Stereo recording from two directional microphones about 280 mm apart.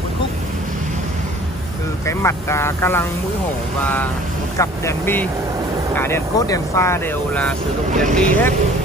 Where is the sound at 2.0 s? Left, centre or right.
Centre.